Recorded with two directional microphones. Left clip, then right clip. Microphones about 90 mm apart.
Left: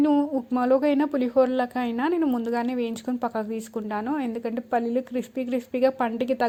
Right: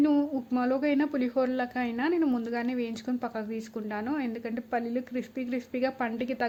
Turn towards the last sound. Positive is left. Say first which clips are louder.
# left 6 dB
turn(degrees=40)  # may be behind; listen again after turning